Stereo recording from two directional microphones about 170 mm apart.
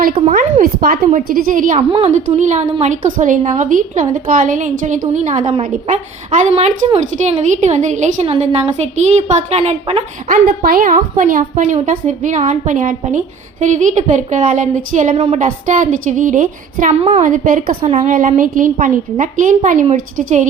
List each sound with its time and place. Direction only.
0.3 s a woman's voice: 45° right (ahead or behind)
0.8 s a woman's voice: 55° right (ahead or behind)
1.9 s a woman's voice: 40° right (ahead or behind)
10.6 s a woman's voice: 60° right (ahead or behind)